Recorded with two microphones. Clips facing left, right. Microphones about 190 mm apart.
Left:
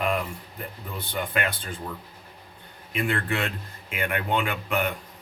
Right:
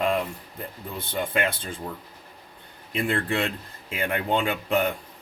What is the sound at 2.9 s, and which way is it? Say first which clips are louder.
Speech: right 1 dB; 30° right (ahead or behind).